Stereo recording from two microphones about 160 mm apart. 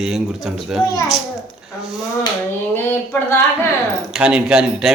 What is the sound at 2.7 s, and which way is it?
Speech, 15° left (ahead or behind).